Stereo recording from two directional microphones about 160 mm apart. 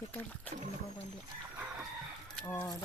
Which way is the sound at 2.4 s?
15° left (ahead or behind).